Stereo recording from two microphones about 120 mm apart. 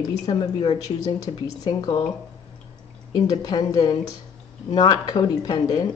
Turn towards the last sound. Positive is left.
turn(degrees=35)  # may be behind; listen again after turning